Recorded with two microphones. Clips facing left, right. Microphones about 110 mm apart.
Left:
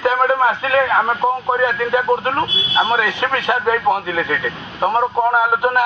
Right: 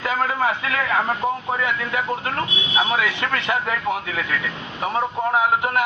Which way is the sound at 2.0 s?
40° left (ahead or behind).